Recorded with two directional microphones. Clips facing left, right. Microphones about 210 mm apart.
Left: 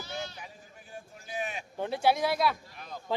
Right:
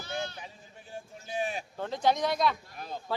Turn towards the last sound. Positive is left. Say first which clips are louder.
# right 4 dB
turn(degrees=-30)  # may be behind; listen again after turning